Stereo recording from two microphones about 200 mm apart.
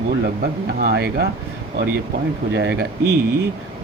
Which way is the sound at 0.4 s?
50° right (ahead or behind).